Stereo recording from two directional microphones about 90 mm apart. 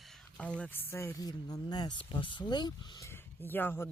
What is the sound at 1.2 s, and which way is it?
Speech, 45° left (ahead or behind).